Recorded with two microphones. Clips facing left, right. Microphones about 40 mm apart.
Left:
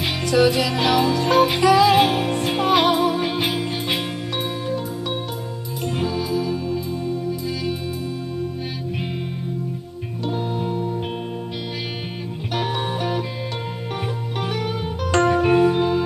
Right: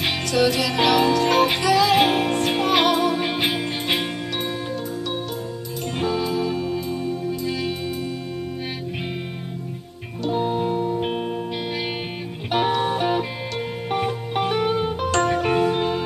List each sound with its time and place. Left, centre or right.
0.3 s music: centre
1.6 s music: centre
2.0 s music: centre
5.9 s music: centre
10.3 s music: centre
12.8 s music: centre
15.1 s music: centre